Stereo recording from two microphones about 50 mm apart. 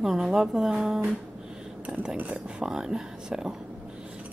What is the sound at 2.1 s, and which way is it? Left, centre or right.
Speech, right.